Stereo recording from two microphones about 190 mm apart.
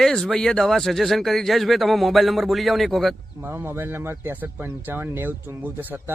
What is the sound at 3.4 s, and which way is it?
Speech, 10° right (ahead or behind).